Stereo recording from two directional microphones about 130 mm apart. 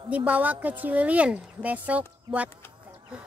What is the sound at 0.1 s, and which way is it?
A woman's voice, 10° right (ahead or behind).